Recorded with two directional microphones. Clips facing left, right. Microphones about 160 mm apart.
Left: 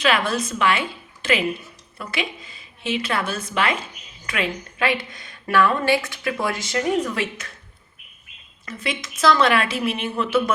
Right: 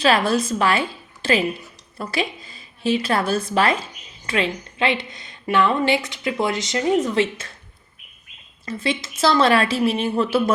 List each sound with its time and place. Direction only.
0.0 s a woman's voice: 35° right (ahead or behind)
8.6 s a woman's voice: 30° right (ahead or behind)